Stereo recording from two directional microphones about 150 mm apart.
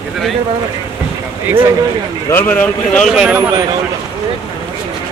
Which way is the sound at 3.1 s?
10° right (ahead or behind).